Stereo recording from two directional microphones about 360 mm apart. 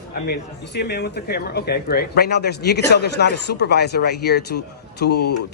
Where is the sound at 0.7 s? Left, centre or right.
Left.